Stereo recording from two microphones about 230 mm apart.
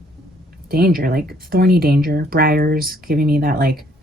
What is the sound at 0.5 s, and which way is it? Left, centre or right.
Speech, right.